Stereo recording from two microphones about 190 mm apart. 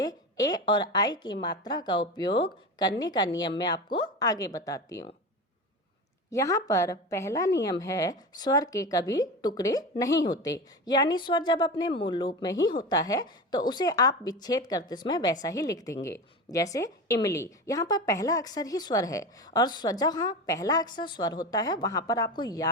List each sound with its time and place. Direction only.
0.0 s a woman's voice: 20° left (ahead or behind)
6.3 s a woman's voice: 15° left (ahead or behind)